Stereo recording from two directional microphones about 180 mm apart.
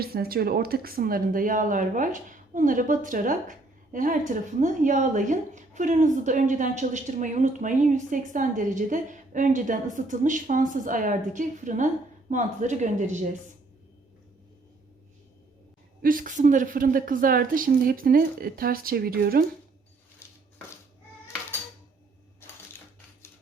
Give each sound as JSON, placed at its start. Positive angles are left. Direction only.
{"t": 0.0, "sound": "speech", "side_deg": -55}
{"t": 16.0, "sound": "speech", "side_deg": -50}